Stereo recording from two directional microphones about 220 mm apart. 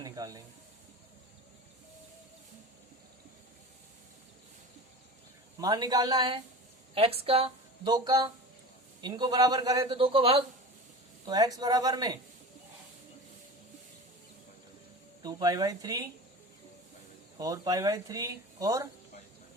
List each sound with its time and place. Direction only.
0.0 s snake: 15° right (ahead or behind)
5.5 s a man's voice: 15° right (ahead or behind)
15.2 s speech: 20° right (ahead or behind)
17.3 s speech: 15° right (ahead or behind)